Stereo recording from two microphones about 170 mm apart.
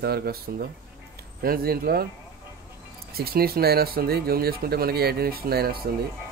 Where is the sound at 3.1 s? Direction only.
65° right (ahead or behind).